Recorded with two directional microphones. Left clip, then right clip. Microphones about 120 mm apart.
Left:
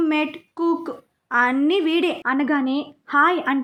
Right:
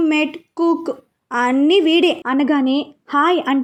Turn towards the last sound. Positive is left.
turn(degrees=-25)  # may be behind; listen again after turning